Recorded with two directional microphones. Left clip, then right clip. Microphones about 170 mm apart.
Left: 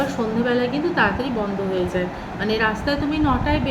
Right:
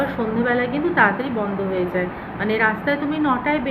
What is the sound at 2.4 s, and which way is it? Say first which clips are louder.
A woman's voice: right 2 dB; 15° left (ahead or behind).